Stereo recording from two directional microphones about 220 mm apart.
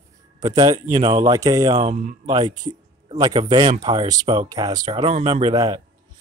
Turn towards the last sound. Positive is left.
turn(degrees=-15)  # may be behind; listen again after turning